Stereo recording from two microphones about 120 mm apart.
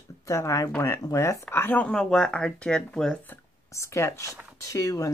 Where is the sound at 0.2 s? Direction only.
25° left (ahead or behind); by 3.2 s 5° left (ahead or behind).